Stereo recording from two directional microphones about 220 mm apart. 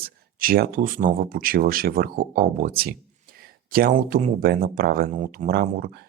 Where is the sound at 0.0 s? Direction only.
40° right (ahead or behind).